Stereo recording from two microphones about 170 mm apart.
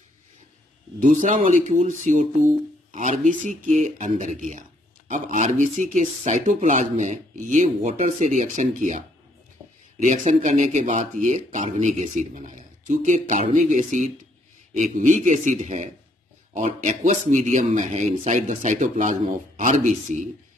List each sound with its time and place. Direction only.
1.0 s speech: 50° right (ahead or behind)
10.0 s speech: 45° right (ahead or behind)